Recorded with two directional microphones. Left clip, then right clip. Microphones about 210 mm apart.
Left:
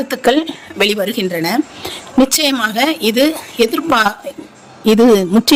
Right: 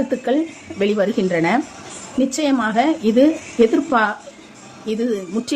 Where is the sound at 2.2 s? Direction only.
50° left (ahead or behind).